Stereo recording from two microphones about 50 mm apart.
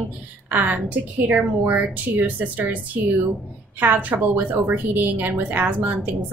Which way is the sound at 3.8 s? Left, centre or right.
Right.